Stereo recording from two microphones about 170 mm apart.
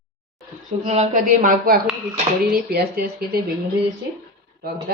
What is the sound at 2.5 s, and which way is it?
Speech, 65° right (ahead or behind).